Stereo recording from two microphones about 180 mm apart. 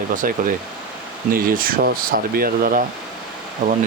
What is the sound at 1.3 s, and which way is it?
Speech, 50° right (ahead or behind).